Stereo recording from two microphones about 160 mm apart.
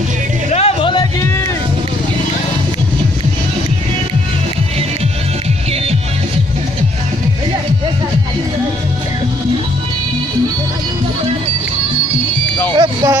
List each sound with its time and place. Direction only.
0.5 s music: 40° left (ahead or behind)
12.7 s vehicle: 25° right (ahead or behind)